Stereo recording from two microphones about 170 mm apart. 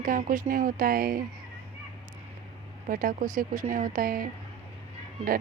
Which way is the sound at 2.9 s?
55° right (ahead or behind).